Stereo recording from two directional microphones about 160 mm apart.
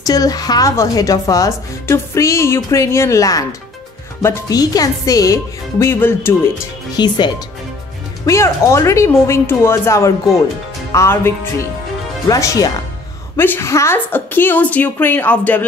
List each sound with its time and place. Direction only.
0.0 s speech: 25° left (ahead or behind)
7.0 s a woman's voice: 25° left (ahead or behind); by 15.6 s 10° left (ahead or behind)